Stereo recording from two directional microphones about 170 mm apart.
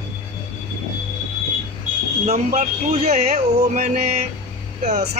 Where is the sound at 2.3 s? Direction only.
40° right (ahead or behind).